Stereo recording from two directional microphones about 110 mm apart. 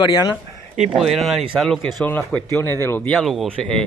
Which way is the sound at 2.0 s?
15° left (ahead or behind).